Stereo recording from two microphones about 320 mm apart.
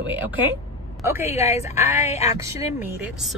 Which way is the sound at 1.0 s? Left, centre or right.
Centre.